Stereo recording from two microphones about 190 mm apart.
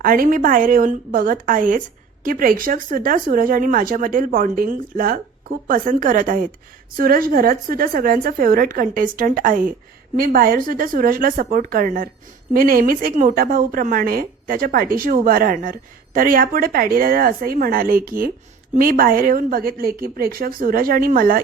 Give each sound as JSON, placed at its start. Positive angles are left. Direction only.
{"t": 0.0, "sound": "speech", "side_deg": -45}